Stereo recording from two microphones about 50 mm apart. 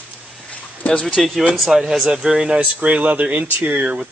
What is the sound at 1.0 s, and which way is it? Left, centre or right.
Speech, centre.